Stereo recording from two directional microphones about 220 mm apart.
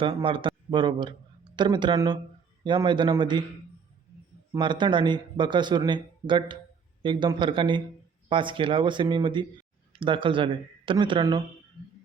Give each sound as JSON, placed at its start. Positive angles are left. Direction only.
{"t": 0.0, "sound": "a man's voice", "side_deg": -25}
{"t": 4.5, "sound": "a man's voice", "side_deg": -20}